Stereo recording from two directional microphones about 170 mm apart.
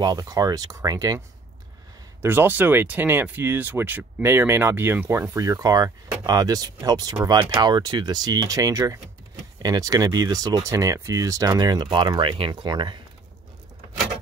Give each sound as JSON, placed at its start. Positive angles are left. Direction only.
{"t": 0.0, "sound": "speech", "side_deg": -20}
{"t": 2.2, "sound": "speech", "side_deg": -10}